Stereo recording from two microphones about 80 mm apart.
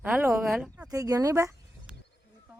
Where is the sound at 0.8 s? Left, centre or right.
Right.